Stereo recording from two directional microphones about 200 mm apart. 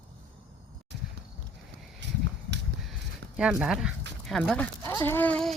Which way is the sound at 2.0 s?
60° right (ahead or behind).